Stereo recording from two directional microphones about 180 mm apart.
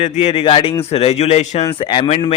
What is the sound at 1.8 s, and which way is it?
Speech, 30° left (ahead or behind).